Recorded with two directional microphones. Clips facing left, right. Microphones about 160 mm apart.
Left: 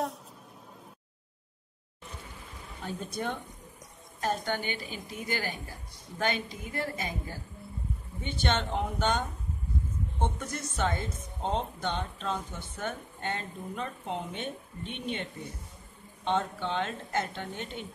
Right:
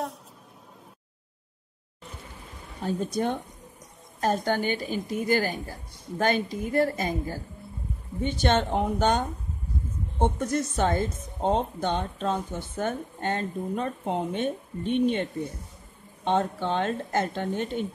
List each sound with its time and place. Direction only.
2.8 s a woman's voice: 35° right (ahead or behind)
16.3 s a woman's voice: 40° right (ahead or behind)